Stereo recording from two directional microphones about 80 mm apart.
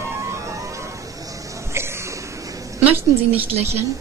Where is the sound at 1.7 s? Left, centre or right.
Right.